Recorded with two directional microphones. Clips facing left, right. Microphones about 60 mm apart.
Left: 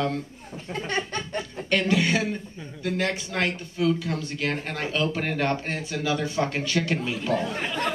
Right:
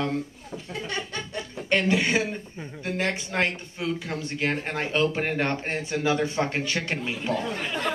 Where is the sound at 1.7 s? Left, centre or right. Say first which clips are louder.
Even; right.